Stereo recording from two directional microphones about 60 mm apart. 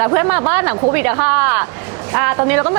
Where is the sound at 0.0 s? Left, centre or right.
Right.